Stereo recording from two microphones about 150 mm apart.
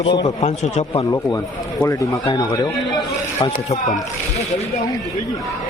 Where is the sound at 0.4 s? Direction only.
50° left (ahead or behind).